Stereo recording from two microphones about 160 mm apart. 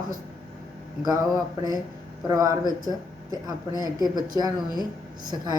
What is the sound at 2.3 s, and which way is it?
Speech, 20° right (ahead or behind).